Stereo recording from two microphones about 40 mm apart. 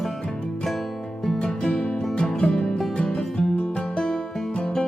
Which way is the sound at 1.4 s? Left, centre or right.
Left.